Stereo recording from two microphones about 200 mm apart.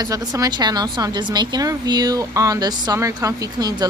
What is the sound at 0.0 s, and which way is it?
Speech, 20° right (ahead or behind).